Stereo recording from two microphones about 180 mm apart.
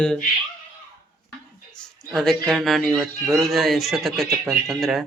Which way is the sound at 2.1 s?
Centre (ahead or behind).